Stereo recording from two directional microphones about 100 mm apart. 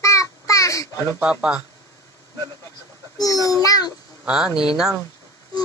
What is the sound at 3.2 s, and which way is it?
Speech, 35° left (ahead or behind).